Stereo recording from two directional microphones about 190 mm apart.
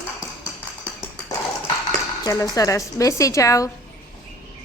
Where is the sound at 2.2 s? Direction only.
15° left (ahead or behind).